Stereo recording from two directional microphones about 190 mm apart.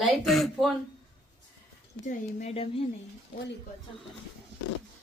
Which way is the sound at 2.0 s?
40° left (ahead or behind).